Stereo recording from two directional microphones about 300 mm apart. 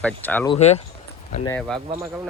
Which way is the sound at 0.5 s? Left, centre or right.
Left.